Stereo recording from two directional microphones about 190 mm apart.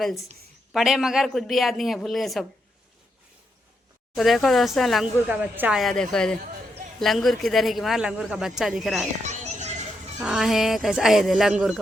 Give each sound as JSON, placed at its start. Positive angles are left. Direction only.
{"t": 0.0, "sound": "speech", "side_deg": 0}
{"t": 4.1, "sound": "speech", "side_deg": 0}
{"t": 9.2, "sound": "music", "side_deg": -40}
{"t": 10.2, "sound": "speech", "side_deg": 0}